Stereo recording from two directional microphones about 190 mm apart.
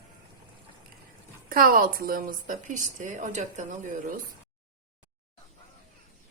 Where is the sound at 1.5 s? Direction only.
50° right (ahead or behind).